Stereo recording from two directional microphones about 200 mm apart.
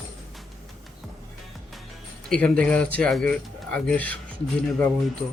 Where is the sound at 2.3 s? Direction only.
5° left (ahead or behind).